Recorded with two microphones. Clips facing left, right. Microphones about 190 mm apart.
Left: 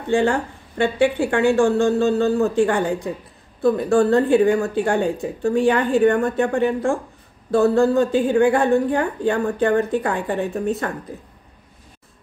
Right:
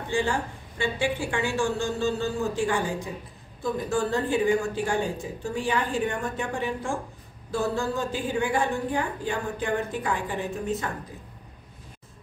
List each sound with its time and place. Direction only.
0.1 s a woman's voice: 60° left (ahead or behind)